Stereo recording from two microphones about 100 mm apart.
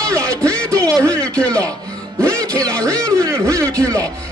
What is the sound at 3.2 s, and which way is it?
Speech, 30° right (ahead or behind).